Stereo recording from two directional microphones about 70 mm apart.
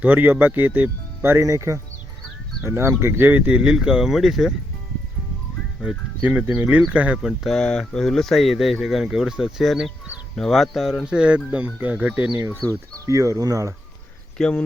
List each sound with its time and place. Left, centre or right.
0.0 s speech: right
1.5 s speech: right
3.0 s speech: right
3.6 s speech: centre
5.8 s speech: right
7.4 s speech: centre
11.0 s speech: centre
12.6 s speech: centre
13.1 s speech: right
14.4 s speech: centre